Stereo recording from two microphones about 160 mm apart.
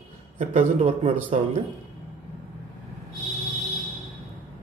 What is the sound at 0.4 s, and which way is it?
Speech, 50° right (ahead or behind).